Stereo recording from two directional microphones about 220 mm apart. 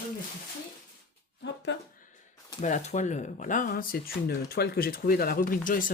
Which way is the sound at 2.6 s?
35° left (ahead or behind).